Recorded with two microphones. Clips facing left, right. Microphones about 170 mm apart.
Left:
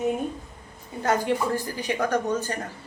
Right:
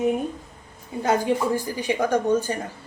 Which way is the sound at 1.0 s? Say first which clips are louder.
Right 2 dB; 10° right (ahead or behind).